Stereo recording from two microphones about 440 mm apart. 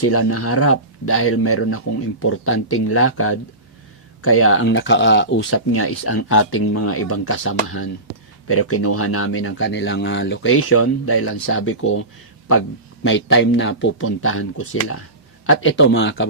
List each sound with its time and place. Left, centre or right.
0.0 s speech: left
13.1 s speech: left